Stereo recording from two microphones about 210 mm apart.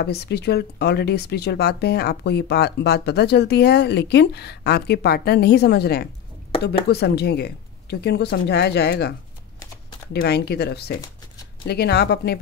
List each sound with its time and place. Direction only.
0.0 s speech: 50° left (ahead or behind)
9.6 s typing: 20° left (ahead or behind)
10.2 s speech: 50° left (ahead or behind)